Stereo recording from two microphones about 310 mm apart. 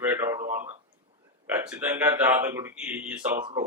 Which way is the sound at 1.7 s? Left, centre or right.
Centre.